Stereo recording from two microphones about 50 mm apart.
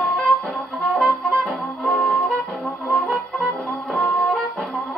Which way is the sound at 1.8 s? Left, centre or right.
Centre.